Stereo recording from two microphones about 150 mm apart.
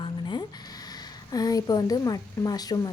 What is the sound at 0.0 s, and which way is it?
Speech, 30° left (ahead or behind).